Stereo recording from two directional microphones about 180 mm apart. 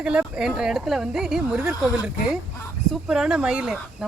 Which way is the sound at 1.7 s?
20° left (ahead or behind).